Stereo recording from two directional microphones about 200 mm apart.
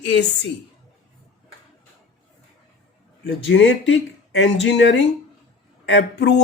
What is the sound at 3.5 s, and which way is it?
Speech, 65° left (ahead or behind).